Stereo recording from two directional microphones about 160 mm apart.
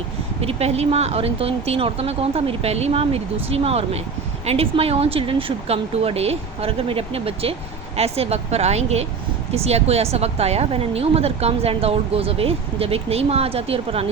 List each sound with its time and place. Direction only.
0.4 s speech: 40° right (ahead or behind)